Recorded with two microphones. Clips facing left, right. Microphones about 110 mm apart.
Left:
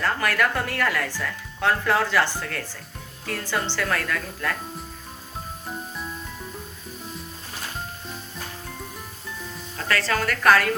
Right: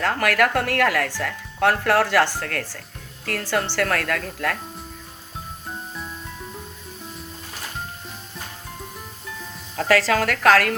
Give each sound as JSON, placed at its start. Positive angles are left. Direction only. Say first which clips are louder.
{"t": 0.0, "sound": "speech", "louder": "right 3 dB", "side_deg": -70}
{"t": 10.1, "sound": "a woman's voice", "louder": "left 1 dB", "side_deg": -90}